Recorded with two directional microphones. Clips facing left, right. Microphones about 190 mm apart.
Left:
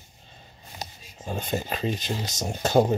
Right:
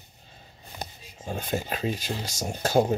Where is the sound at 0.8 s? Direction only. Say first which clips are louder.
Right 1 dB; 55° right (ahead or behind).